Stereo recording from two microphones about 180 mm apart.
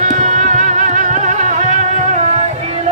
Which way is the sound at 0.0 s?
40° right (ahead or behind).